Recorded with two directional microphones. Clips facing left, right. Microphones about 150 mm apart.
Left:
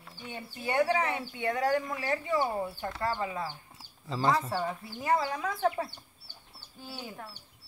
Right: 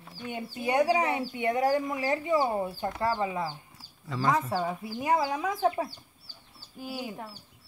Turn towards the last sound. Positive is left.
turn(degrees=-10)  # may be behind; listen again after turning